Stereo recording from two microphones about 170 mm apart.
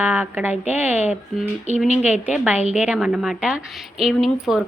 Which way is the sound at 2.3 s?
5° right (ahead or behind).